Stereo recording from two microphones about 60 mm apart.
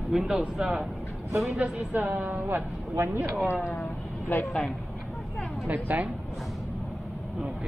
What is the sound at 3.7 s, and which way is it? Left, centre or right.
Vehicle, left.